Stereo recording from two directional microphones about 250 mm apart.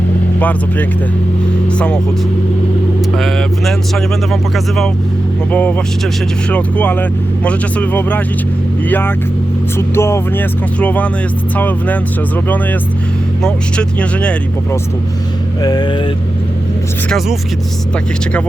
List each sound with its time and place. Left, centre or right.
0.3 s speech: centre
3.2 s speech: centre
13.4 s speech: centre
15.6 s speech: centre
17.1 s speech: centre